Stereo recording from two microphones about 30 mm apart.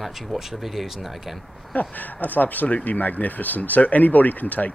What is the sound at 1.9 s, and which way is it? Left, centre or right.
Speech, left.